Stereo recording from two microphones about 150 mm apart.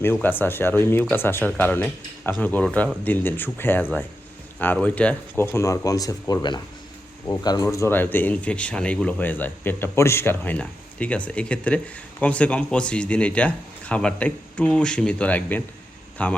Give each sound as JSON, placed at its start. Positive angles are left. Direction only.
{"t": 0.0, "sound": "speech", "side_deg": 15}